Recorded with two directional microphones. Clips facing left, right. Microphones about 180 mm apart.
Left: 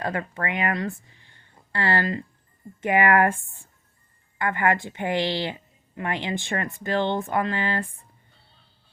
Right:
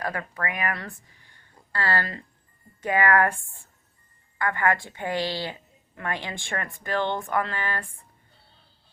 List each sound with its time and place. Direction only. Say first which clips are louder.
0.0 s a woman's voice: left 3 dB; 25° left (ahead or behind)